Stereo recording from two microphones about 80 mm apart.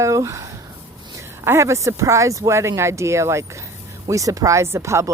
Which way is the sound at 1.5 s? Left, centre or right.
Right.